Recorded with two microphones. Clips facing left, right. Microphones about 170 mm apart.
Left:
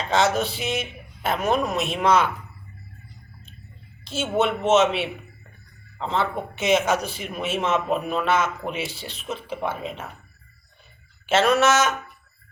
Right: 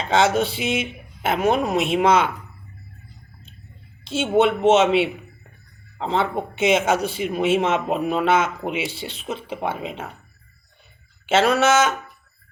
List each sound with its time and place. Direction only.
0.1 s speech: 30° right (ahead or behind)
4.0 s speech: 25° right (ahead or behind)
11.3 s speech: 30° right (ahead or behind)